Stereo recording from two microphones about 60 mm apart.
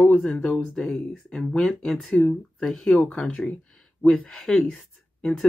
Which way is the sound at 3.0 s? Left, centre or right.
Left.